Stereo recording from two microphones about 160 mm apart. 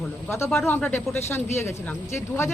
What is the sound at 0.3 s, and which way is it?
Speech, 15° left (ahead or behind).